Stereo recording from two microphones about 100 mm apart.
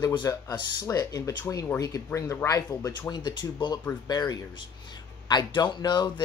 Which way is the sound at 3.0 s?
45° left (ahead or behind).